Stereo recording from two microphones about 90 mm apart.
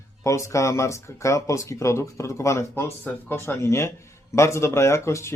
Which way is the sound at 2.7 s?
20° left (ahead or behind).